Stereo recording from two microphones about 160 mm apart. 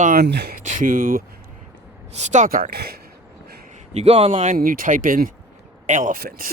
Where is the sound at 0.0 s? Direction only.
70° right (ahead or behind); by 0.5 s 90° right.